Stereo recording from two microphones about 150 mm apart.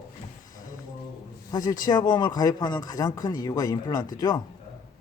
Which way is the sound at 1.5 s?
25° left (ahead or behind).